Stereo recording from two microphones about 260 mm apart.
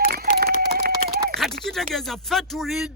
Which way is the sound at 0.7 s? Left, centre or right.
Right.